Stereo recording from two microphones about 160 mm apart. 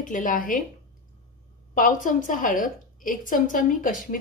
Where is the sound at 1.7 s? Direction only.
55° left (ahead or behind).